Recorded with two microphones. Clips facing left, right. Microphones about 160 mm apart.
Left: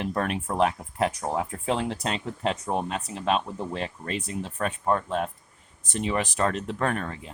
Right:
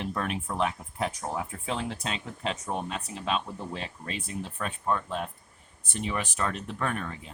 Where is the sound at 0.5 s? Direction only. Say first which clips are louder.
Left 7 dB; 65° left (ahead or behind).